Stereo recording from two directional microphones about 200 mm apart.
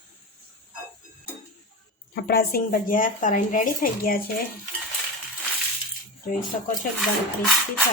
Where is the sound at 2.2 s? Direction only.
50° left (ahead or behind).